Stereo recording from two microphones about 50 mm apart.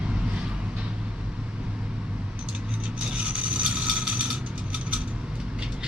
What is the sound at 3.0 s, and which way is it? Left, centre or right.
Vehicle, right.